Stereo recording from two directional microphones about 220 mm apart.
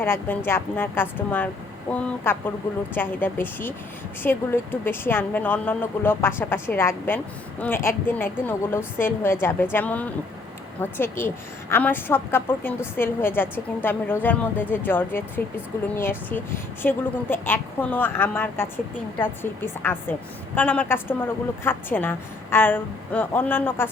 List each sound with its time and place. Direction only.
0.0 s a woman's voice: 10° left (ahead or behind)